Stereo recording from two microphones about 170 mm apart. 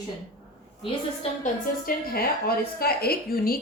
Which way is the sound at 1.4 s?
60° left (ahead or behind).